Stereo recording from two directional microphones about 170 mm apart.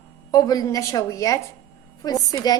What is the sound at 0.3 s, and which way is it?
Dishes, 20° left (ahead or behind).